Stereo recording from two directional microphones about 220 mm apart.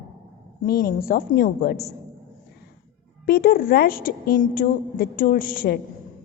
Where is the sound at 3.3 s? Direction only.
40° left (ahead or behind).